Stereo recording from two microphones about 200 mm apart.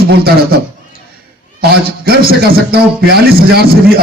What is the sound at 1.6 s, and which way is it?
A man's voice, 50° right (ahead or behind).